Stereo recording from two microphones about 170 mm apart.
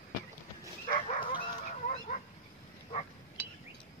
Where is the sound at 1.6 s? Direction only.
50° left (ahead or behind).